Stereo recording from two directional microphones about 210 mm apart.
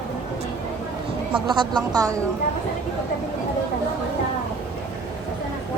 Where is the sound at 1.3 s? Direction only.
20° right (ahead or behind).